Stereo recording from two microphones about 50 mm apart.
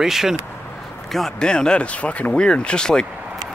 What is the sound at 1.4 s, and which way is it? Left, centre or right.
Speech, centre.